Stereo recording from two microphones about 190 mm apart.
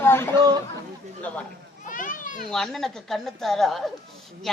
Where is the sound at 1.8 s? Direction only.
45° left (ahead or behind).